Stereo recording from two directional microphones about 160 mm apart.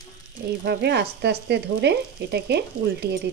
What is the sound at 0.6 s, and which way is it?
Frying, 90° right.